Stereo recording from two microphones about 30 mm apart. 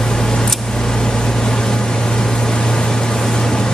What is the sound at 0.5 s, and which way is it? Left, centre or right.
Vehicle, centre.